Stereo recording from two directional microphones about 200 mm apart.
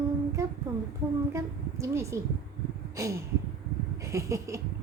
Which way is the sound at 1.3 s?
15° right (ahead or behind).